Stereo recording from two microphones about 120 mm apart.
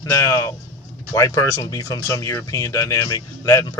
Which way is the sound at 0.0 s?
25° left (ahead or behind).